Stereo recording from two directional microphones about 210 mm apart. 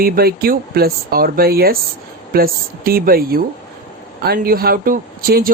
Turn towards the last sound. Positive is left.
turn(degrees=-45)  # may be behind; listen again after turning